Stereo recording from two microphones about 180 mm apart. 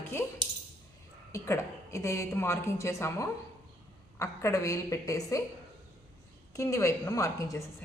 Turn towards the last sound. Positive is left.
turn(degrees=20)  # may be behind; listen again after turning